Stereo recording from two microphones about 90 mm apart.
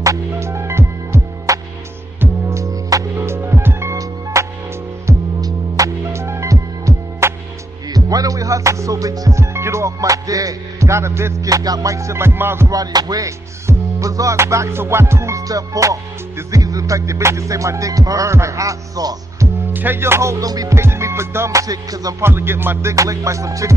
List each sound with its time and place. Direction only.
0.0 s music: 35° right (ahead or behind)
12.7 s music: 45° right (ahead or behind)
19.7 s music: 20° right (ahead or behind); by 20.7 s 40° right (ahead or behind)
20.7 s music: 30° right (ahead or behind)
22.2 s music: 25° right (ahead or behind)